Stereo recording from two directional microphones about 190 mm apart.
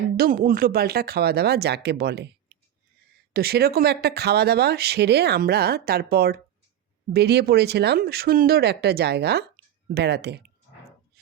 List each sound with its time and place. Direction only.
0.2 s speech: 50° right (ahead or behind)